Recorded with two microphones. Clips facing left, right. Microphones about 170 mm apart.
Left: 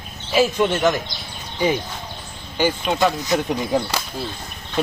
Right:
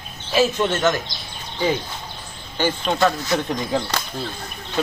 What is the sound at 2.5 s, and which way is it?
Speech, 10° left (ahead or behind).